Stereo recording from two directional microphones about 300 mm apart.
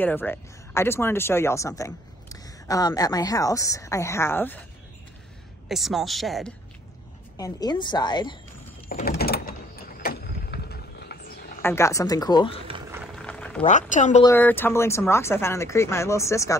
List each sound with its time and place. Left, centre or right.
0.0 s speech: centre
5.7 s speech: centre
7.3 s speech: centre
8.8 s sliding door: left
11.6 s speech: centre
12.6 s boiling: centre
13.0 s boiling: centre
13.6 s a woman's voice: left
14.2 s speech: centre